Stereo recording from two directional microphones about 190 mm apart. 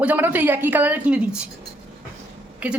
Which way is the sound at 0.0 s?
10° right (ahead or behind).